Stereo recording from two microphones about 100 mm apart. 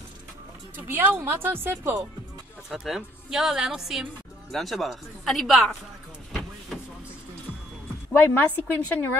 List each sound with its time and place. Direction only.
0.7 s speech: 20° right (ahead or behind)
2.7 s speech: 5° right (ahead or behind)
8.1 s a woman's voice: 15° left (ahead or behind)